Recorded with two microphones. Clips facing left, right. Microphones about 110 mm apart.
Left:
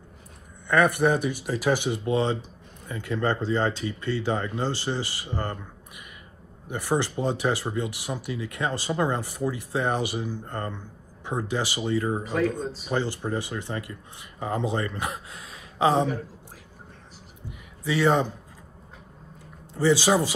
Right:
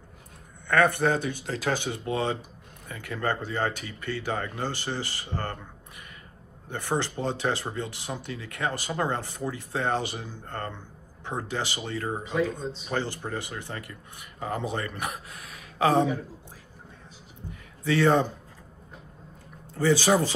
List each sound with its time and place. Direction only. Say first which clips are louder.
0.7 s speech: left 2 dB; 15° left (ahead or behind)
6.9 s speech: left 3 dB; 15° left (ahead or behind)
17.5 s a sound: right 2 dB; 15° left (ahead or behind)
19.7 s speech: left 1 dB; 15° left (ahead or behind)